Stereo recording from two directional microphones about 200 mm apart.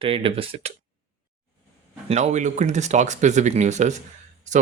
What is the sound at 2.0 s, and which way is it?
Speech, 35° right (ahead or behind).